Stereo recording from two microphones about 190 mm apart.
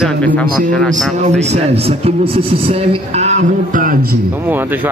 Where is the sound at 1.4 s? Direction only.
35° right (ahead or behind); by 4.2 s 50° right (ahead or behind).